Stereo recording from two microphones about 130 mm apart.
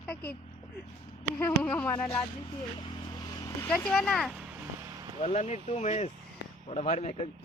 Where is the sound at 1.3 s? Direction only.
15° left (ahead or behind).